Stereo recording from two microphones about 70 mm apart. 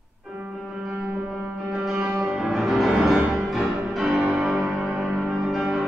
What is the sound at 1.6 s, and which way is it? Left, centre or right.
Music, centre.